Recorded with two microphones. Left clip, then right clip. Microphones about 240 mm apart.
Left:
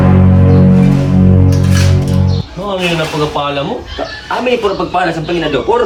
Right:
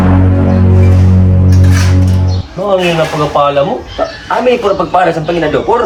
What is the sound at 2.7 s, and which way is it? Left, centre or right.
Speech, centre.